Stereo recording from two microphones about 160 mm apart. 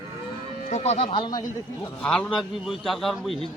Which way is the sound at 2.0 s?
5° left (ahead or behind).